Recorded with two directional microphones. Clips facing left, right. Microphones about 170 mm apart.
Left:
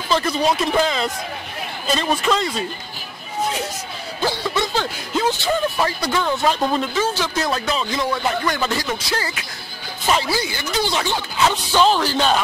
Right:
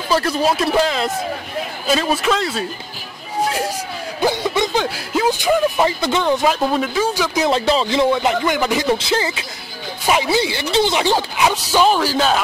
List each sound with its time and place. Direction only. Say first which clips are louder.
0.1 s speech: right 2 dB; 5° right (ahead or behind)
4.2 s speech: right 4 dB; 20° right (ahead or behind)
6.4 s speech: right 2 dB; 5° right (ahead or behind)
7.5 s speech: right 6 dB; 25° right (ahead or behind)
8.8 s speech: right 7 dB; 25° right (ahead or behind); by 12.4 s 5° right (ahead or behind)